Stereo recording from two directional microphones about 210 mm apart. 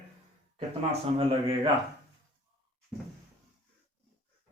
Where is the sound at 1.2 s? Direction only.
25° right (ahead or behind).